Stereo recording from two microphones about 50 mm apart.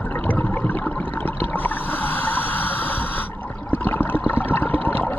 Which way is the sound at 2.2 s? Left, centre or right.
Left.